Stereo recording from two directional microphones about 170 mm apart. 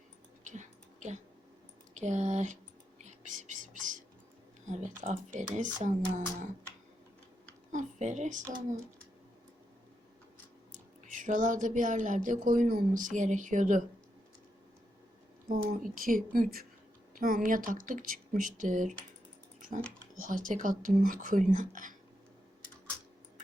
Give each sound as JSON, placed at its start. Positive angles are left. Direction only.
{"t": 0.4, "sound": "a sound", "side_deg": -45}
{"t": 1.9, "sound": "speech", "side_deg": -45}
{"t": 3.0, "sound": "whispering", "side_deg": -45}
{"t": 4.7, "sound": "a woman's voice", "side_deg": -45}
{"t": 7.7, "sound": "a woman's voice", "side_deg": -45}
{"t": 8.4, "sound": "speech", "side_deg": -20}
{"t": 11.1, "sound": "a woman's voice", "side_deg": -50}
{"t": 15.4, "sound": "a woman's voice", "side_deg": -55}
{"t": 20.1, "sound": "a woman's voice", "side_deg": -55}